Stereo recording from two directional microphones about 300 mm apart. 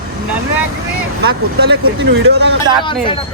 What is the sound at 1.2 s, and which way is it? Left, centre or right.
Speech, right.